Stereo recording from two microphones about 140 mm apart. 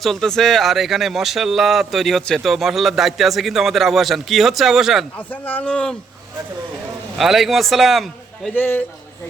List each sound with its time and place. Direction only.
0.0 s speech: centre (ahead or behind)
5.1 s speech: 10° left (ahead or behind)
7.2 s speech: centre (ahead or behind)
8.5 s speech: 15° left (ahead or behind)